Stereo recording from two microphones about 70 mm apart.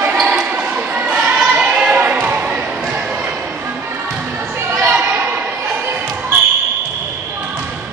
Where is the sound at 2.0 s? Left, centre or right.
Right.